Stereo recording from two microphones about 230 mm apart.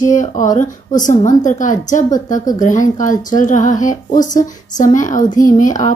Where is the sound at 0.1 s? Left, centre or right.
Left.